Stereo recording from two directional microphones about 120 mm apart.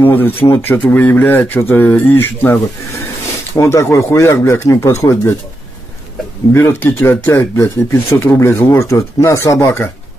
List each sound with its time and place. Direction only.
0.0 s speech: 15° left (ahead or behind)
6.5 s speech: 20° left (ahead or behind)